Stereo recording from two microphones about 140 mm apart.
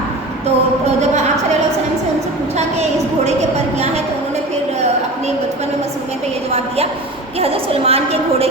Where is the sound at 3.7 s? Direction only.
50° right (ahead or behind).